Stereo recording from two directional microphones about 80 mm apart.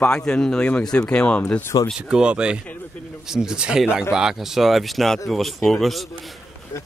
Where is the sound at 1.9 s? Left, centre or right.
Centre.